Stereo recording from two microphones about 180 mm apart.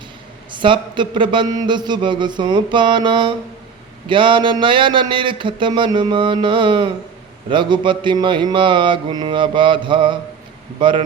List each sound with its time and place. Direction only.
0.5 s a man's voice: 25° right (ahead or behind)